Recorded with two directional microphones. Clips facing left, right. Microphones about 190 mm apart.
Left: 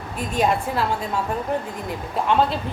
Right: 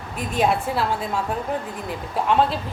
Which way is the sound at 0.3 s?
10° right (ahead or behind).